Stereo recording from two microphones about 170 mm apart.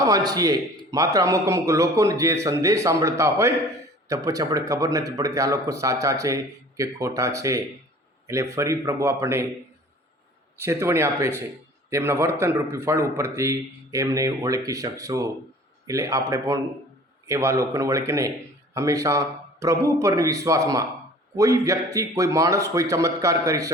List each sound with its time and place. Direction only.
0.0 s a man's voice: 20° right (ahead or behind)
10.6 s a man's voice: 15° right (ahead or behind)